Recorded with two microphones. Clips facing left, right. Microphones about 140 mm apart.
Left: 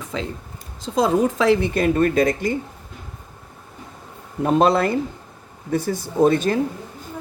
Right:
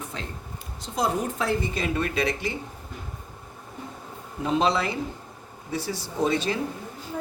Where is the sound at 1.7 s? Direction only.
50° left (ahead or behind).